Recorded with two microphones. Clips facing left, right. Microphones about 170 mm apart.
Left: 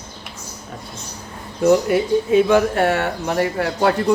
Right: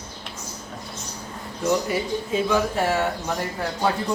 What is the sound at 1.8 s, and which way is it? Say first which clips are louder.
Speech: left 8 dB; 60° left (ahead or behind).